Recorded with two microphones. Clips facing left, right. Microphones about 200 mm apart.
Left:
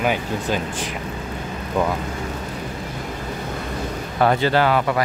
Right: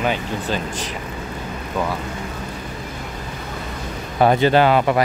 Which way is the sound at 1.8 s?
15° left (ahead or behind).